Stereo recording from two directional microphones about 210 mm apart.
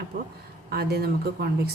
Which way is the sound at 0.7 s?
50° right (ahead or behind).